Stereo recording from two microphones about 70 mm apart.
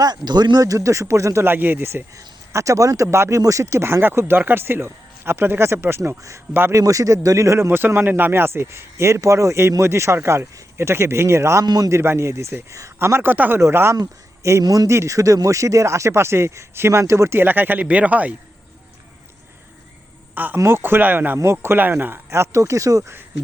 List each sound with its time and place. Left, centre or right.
0.3 s speech: right
1.5 s a man's voice: right
2.1 s a man's voice: right
6.0 s speech: right
6.5 s a man's voice: right
6.7 s a man's voice: right
11.6 s a man's voice: right
11.9 s a man's voice: right
13.6 s a man's voice: right
14.6 s speech: right
14.8 s a man's voice: right
20.3 s speech: right
20.6 s a man's voice: right
21.3 s a man's voice: right